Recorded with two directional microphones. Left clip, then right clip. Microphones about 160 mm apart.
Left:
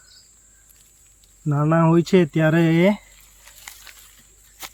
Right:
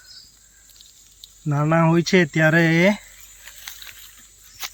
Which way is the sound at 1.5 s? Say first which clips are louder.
Even; centre (ahead or behind).